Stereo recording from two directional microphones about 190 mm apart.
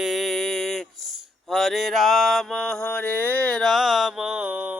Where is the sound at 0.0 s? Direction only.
Centre (ahead or behind).